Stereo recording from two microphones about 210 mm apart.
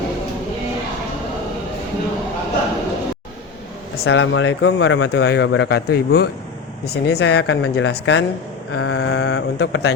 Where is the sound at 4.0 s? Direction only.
70° left (ahead or behind).